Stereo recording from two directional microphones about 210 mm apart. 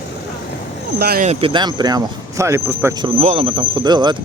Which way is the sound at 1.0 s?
45° right (ahead or behind).